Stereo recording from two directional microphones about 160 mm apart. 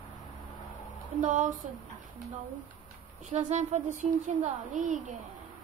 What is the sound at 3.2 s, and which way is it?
Speech, 50° right (ahead or behind).